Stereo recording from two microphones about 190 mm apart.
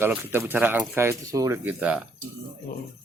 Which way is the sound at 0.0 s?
10° right (ahead or behind).